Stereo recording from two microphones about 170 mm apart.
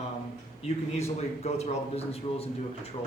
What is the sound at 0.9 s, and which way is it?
A man's voice, 40° left (ahead or behind).